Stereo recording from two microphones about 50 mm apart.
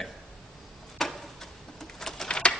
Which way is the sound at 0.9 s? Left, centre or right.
Centre.